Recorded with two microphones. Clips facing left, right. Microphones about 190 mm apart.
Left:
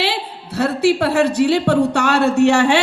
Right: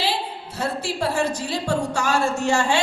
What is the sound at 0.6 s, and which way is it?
Speech, 65° left (ahead or behind).